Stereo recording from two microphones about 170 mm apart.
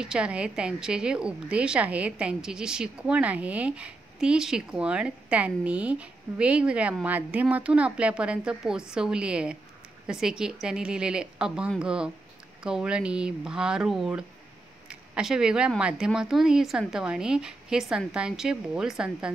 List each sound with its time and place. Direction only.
0.0 s a woman's voice: 5° right (ahead or behind)